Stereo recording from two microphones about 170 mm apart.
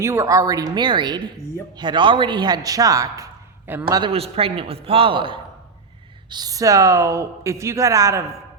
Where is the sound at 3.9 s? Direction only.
30° right (ahead or behind).